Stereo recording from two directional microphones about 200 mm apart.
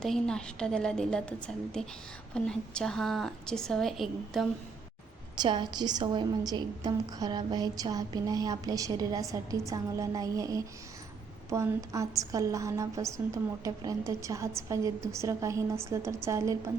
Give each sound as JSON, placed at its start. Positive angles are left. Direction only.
{"t": 0.0, "sound": "a woman's voice", "side_deg": 5}
{"t": 5.4, "sound": "a woman's voice", "side_deg": -20}